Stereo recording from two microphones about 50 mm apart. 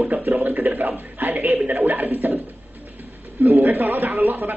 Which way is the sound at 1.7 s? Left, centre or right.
Right.